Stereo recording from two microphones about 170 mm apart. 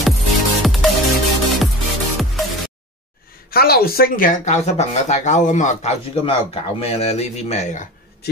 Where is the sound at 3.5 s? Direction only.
65° left (ahead or behind); by 7.9 s 45° left (ahead or behind).